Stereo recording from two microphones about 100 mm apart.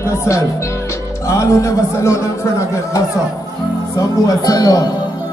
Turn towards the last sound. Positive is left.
turn(degrees=40)  # may be behind; listen again after turning